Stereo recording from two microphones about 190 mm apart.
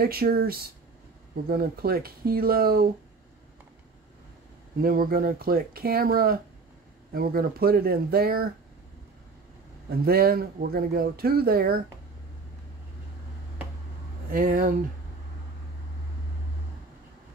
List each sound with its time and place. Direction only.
0.0 s speech: 50° right (ahead or behind)
4.8 s speech: 50° right (ahead or behind)
9.8 s speech: 55° right (ahead or behind)
14.3 s speech: 45° right (ahead or behind)